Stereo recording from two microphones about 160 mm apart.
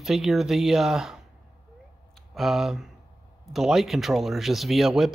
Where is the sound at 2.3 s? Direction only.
Centre (ahead or behind).